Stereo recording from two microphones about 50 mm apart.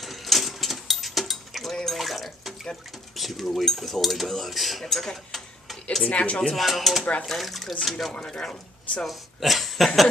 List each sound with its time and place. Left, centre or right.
0.0 s cutlery: centre
6.0 s speech: left
6.5 s speech: centre
8.3 s speech: centre
9.0 s speech: centre